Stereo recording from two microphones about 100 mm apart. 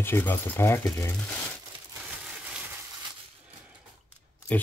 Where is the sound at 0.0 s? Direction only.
20° left (ahead or behind).